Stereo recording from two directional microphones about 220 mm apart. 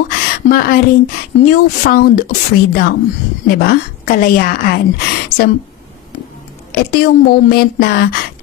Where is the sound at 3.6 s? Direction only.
40° left (ahead or behind).